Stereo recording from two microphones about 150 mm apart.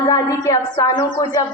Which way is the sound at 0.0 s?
25° left (ahead or behind).